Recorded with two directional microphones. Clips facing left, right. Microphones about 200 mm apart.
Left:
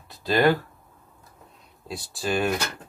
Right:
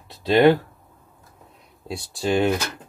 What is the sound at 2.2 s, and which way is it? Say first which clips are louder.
Speech: right 5 dB; 20° right (ahead or behind).